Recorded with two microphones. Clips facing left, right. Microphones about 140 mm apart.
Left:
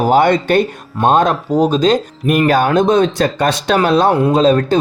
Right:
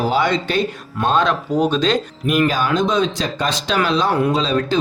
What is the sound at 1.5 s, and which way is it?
Speech, 35° left (ahead or behind).